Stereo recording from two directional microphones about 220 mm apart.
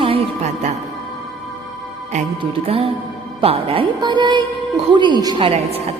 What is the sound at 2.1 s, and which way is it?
A woman's voice, 30° right (ahead or behind).